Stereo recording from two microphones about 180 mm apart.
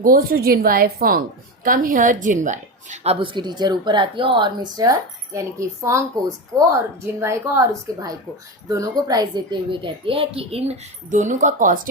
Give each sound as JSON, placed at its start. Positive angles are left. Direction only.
{"t": 0.0, "sound": "a woman's voice", "side_deg": -55}